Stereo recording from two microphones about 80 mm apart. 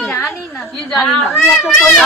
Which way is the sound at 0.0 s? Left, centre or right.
Centre.